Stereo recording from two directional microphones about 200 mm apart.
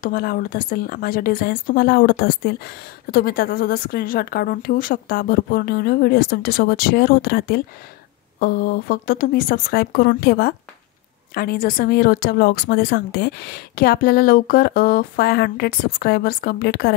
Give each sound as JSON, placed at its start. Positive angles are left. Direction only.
{"t": 0.0, "sound": "a woman's voice", "side_deg": 45}